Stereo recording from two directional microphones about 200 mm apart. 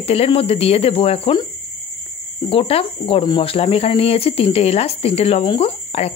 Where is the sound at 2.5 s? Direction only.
30° left (ahead or behind).